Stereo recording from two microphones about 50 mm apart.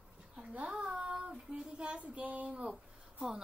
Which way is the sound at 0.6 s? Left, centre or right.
Right.